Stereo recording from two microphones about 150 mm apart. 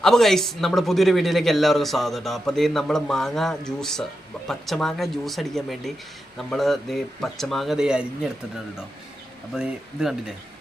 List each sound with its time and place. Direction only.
0.0 s a man's voice: centre (ahead or behind)
9.6 s a man's voice: 5° right (ahead or behind)